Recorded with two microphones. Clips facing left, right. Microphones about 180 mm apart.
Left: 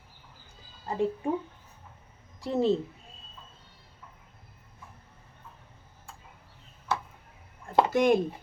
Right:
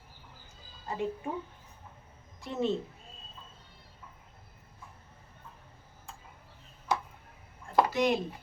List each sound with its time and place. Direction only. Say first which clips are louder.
0.9 s speech: left 5 dB; 35° left (ahead or behind)
2.4 s speech: left 6 dB; 35° left (ahead or behind)
6.9 s tick-tock: even; 10° right (ahead or behind)
7.9 s speech: left 5 dB; 50° left (ahead or behind)